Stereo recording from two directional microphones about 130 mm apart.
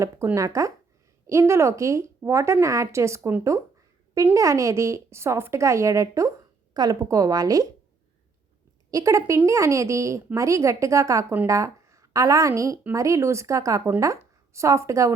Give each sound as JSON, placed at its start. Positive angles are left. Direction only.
{"t": 0.3, "sound": "a woman's voice", "side_deg": -25}
{"t": 8.9, "sound": "a woman's voice", "side_deg": -25}